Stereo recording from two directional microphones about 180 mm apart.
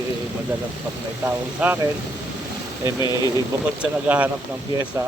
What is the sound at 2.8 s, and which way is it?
Speech, 25° left (ahead or behind).